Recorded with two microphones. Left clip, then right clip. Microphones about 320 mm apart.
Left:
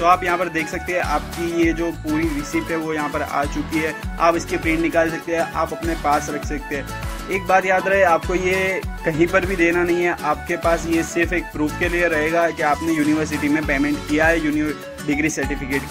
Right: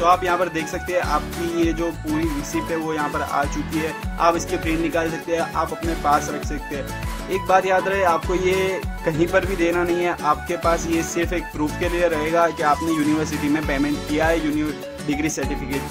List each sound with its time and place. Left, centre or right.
0.0 s music: centre
7.3 s music: centre